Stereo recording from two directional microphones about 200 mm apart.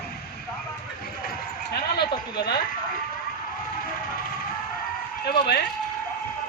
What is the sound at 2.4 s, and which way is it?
Speech, 50° left (ahead or behind).